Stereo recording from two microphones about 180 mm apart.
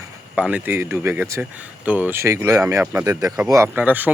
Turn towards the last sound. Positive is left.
turn(degrees=-10)  # may be behind; listen again after turning